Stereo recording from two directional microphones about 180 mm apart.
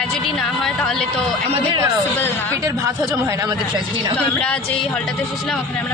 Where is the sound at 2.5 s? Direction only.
15° right (ahead or behind).